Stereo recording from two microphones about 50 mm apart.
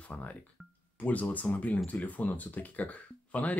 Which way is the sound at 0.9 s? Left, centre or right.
Left.